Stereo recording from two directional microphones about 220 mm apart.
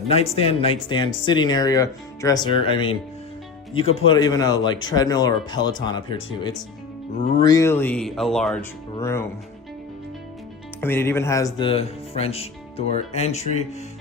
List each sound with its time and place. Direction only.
0.1 s speech: 25° left (ahead or behind)
3.9 s speech: 20° left (ahead or behind); by 8.6 s centre (ahead or behind)
9.0 s speech: 10° left (ahead or behind)
10.8 s speech: 10° left (ahead or behind); by 13.4 s 30° left (ahead or behind)